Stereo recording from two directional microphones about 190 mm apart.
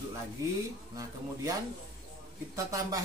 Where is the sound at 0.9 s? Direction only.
15° right (ahead or behind).